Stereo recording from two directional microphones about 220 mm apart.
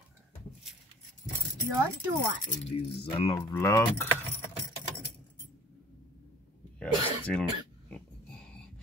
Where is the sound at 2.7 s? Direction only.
25° left (ahead or behind).